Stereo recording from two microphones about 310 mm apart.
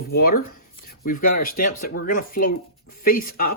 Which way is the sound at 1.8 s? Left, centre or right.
Left.